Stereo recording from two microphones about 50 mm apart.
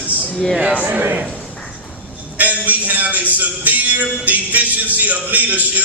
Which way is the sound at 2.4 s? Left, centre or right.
Right.